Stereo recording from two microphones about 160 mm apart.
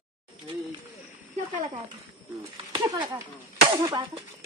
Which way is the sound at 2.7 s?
25° right (ahead or behind).